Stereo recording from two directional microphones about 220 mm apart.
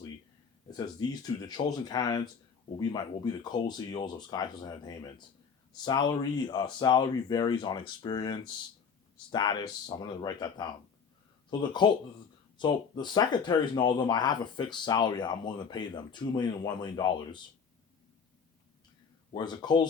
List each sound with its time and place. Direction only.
1.1 s speech: 15° left (ahead or behind)
11.8 s speech: 20° left (ahead or behind)
19.3 s speech: 20° left (ahead or behind)